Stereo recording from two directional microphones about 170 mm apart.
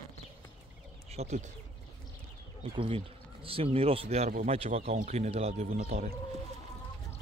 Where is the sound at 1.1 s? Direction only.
40° right (ahead or behind).